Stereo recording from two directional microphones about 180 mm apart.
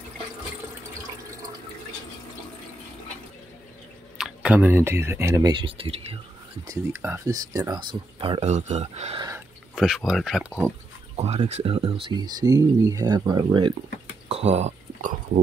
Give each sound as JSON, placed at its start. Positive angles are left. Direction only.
{"t": 4.2, "sound": "speech", "side_deg": -5}
{"t": 6.7, "sound": "speech", "side_deg": -15}
{"t": 9.8, "sound": "speech", "side_deg": 0}
{"t": 11.1, "sound": "speech", "side_deg": -35}
{"t": 14.3, "sound": "a sound", "side_deg": -40}